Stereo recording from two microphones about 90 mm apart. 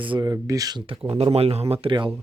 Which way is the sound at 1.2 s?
90° right.